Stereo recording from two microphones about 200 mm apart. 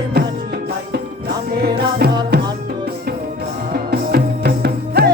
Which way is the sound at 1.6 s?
50° right (ahead or behind).